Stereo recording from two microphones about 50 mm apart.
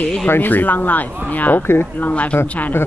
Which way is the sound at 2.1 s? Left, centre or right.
Left.